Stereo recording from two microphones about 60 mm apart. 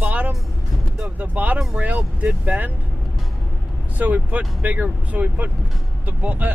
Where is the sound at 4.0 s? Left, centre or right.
Right.